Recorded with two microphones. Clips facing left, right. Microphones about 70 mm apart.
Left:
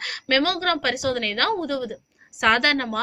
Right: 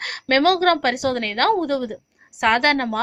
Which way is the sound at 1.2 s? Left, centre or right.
Right.